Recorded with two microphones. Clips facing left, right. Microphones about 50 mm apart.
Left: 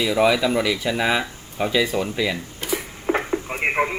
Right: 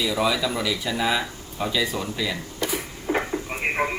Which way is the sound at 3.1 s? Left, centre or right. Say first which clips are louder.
Left 2 dB; left.